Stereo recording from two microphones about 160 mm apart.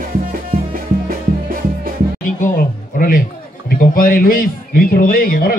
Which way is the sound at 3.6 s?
60° left (ahead or behind).